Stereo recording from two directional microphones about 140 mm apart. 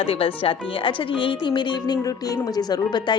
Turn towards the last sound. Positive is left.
turn(degrees=30)  # may be behind; listen again after turning